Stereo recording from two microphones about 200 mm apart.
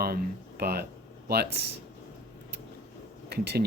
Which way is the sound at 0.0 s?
50° right (ahead or behind).